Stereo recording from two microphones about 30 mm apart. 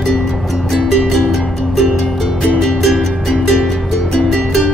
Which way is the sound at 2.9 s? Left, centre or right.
Centre.